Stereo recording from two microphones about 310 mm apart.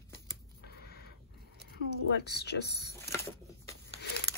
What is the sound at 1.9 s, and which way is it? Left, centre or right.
Speech, left.